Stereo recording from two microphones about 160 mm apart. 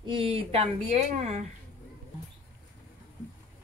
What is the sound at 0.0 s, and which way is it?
Speech, 35° right (ahead or behind).